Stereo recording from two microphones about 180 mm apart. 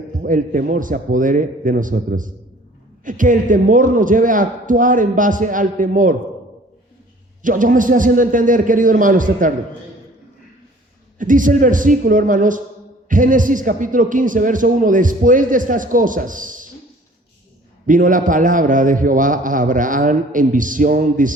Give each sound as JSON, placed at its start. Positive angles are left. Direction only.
{"t": 0.3, "sound": "a man's voice", "side_deg": -45}
{"t": 7.4, "sound": "a man's voice", "side_deg": -50}
{"t": 11.2, "sound": "a man's voice", "side_deg": -45}
{"t": 17.8, "sound": "a man's voice", "side_deg": -45}